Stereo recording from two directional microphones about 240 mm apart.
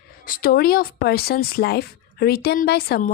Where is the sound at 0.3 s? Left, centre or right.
Left.